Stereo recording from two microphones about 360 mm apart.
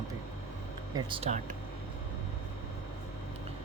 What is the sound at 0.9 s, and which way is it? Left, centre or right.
Speech, centre.